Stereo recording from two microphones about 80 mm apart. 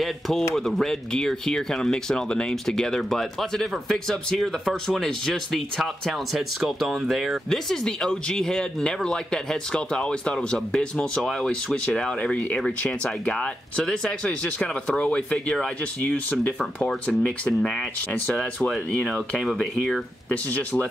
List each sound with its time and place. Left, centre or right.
0.0 s speech: centre
18.1 s speech: centre
18.4 s speech: centre
20.2 s speech: centre